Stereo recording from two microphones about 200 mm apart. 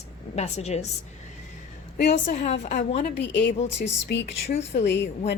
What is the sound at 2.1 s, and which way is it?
Speech, 40° left (ahead or behind).